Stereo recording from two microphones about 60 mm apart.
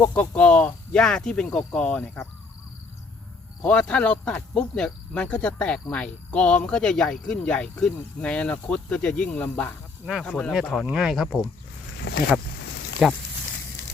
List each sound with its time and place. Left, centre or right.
0.1 s speech: left
1.8 s speech: left
3.6 s speech: centre
9.3 s speech: left
10.2 s speech: centre
10.5 s speech: centre
13.0 s speech: centre